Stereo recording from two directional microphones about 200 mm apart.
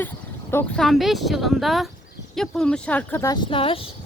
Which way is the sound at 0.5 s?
Centre (ahead or behind).